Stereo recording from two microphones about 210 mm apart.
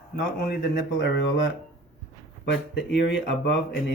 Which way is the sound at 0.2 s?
50° left (ahead or behind).